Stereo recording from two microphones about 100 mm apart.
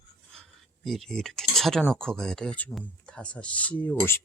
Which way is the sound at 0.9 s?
5° left (ahead or behind).